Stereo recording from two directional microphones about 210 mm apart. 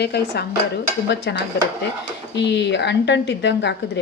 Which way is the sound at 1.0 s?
55° left (ahead or behind).